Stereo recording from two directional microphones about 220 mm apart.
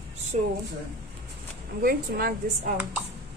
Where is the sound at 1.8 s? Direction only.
45° right (ahead or behind).